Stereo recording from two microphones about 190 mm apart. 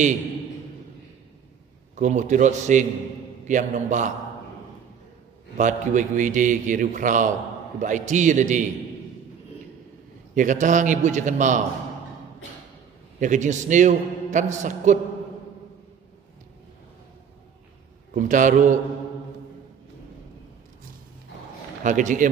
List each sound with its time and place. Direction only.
2.0 s a man's voice: 40° right (ahead or behind)
5.6 s a man's voice: 40° right (ahead or behind)
10.3 s a man's voice: 40° right (ahead or behind)
13.2 s a man's voice: 40° right (ahead or behind)
18.1 s a man's voice: 45° right (ahead or behind)
21.8 s a man's voice: 40° right (ahead or behind)